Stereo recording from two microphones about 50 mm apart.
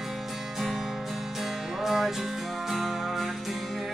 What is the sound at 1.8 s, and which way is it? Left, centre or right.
Music, centre.